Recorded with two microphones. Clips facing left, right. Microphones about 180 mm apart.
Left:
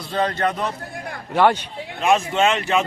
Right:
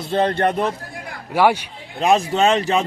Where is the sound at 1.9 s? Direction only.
35° right (ahead or behind).